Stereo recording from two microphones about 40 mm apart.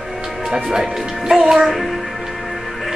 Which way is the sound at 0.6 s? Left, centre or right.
Centre.